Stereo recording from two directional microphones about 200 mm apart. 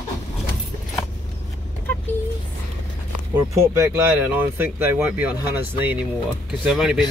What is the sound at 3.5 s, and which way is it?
Speech, 15° right (ahead or behind).